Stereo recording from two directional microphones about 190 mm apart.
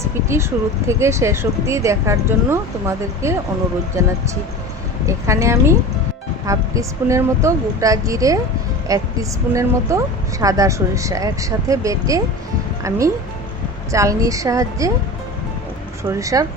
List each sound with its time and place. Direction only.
0.0 s a sound: 15° right (ahead or behind)
0.9 s speech: 15° right (ahead or behind)
16.1 s speech: 15° right (ahead or behind)